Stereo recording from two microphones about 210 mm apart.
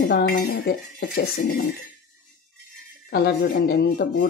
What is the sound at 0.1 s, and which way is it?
Speech, 50° left (ahead or behind).